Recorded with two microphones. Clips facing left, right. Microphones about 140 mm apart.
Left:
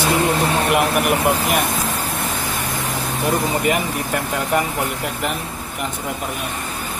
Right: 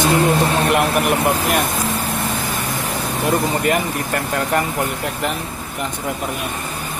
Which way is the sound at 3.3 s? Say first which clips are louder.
Right 1 dB; centre (ahead or behind).